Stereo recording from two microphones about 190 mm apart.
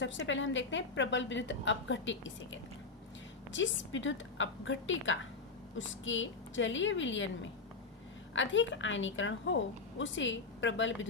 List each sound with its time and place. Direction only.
0.0 s a woman's voice: 80° left
8.3 s a woman's voice: 80° left